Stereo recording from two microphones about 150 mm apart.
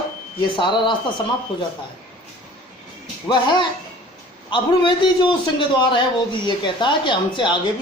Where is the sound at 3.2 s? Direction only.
30° left (ahead or behind).